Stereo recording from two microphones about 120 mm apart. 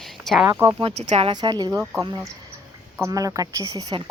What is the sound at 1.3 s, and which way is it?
A woman's voice, 35° right (ahead or behind).